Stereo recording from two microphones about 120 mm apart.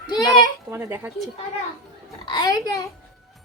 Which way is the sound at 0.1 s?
35° left (ahead or behind).